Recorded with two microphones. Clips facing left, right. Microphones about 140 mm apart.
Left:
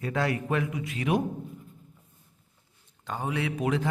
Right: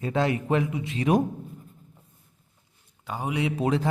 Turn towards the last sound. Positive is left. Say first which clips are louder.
# right 3 dB
turn(degrees=-30)  # may be behind; listen again after turning